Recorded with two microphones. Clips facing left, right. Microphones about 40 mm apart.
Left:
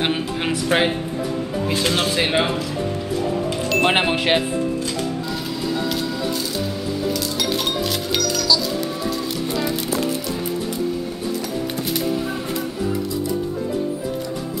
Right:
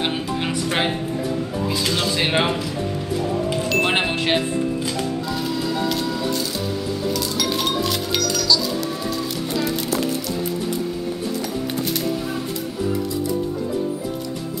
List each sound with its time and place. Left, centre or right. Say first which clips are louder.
0.0 s music: left 1 dB; centre
0.7 s speech: left 5 dB; centre
1.7 s speech: left 3 dB; left
2.2 s speech: even; centre
3.4 s music: even; centre
3.8 s speech: left 2 dB; centre
5.3 s music: right 1 dB; centre